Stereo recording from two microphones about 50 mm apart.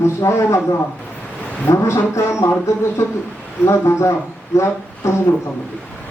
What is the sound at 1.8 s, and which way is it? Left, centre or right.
Music, left.